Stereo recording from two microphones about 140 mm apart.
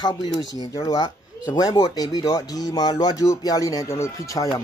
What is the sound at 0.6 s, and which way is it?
Speech, 25° left (ahead or behind).